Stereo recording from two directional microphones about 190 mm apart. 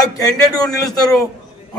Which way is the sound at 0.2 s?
20° left (ahead or behind).